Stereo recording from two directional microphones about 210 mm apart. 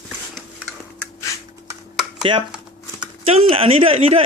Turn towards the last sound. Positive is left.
turn(degrees=-25)  # may be behind; listen again after turning